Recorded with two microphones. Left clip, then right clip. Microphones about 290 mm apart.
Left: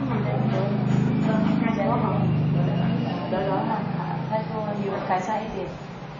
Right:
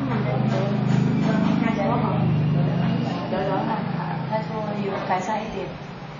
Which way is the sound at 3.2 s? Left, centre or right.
Centre.